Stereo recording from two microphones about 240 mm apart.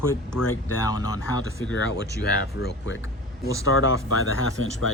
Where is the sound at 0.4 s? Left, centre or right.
Left.